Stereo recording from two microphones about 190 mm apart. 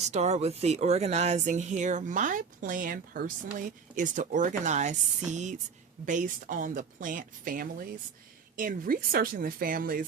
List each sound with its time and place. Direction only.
0.0 s speech: 35° right (ahead or behind)